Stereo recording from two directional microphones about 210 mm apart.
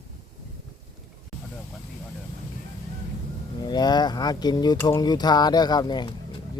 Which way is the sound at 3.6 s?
20° left (ahead or behind).